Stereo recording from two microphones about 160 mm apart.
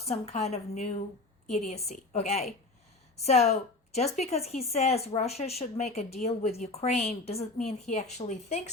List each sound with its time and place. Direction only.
0.0 s a woman's voice: 40° left (ahead or behind)